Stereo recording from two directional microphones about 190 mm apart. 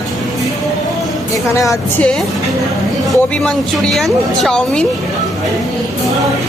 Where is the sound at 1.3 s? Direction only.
15° left (ahead or behind).